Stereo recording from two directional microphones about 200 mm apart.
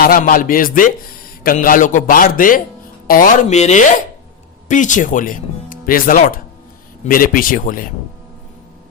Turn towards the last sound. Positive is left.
turn(degrees=45)  # may be behind; listen again after turning